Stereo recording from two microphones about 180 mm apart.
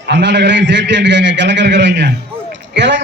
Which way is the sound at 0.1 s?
75° right (ahead or behind).